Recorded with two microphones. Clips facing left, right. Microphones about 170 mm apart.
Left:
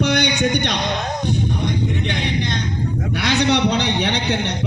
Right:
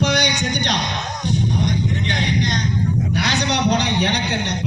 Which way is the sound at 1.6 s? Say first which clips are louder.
Even; 55° left (ahead or behind).